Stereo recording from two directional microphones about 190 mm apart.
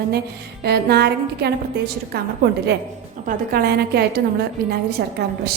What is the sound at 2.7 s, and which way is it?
A woman's voice, 60° right (ahead or behind).